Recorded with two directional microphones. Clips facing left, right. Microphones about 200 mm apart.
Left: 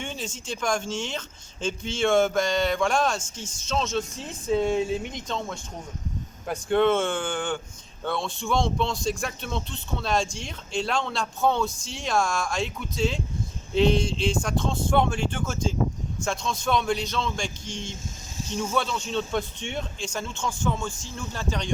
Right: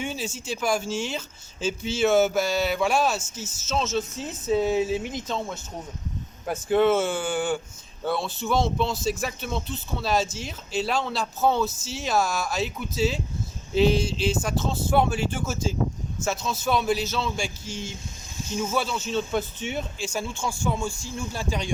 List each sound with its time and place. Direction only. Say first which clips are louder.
0.0 s speech: right 3 dB; 5° right (ahead or behind)